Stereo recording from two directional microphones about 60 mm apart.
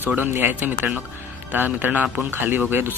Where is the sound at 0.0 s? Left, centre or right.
Right.